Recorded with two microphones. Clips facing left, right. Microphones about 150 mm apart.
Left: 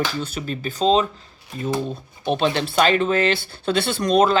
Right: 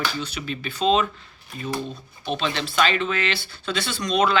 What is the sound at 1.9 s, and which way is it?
Speech, 50° left (ahead or behind).